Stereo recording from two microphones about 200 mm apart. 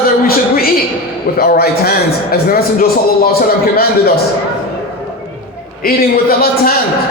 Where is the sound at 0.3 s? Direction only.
50° left (ahead or behind).